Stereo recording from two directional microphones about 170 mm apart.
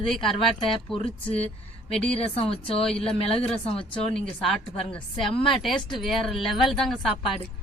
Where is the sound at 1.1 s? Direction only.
35° left (ahead or behind).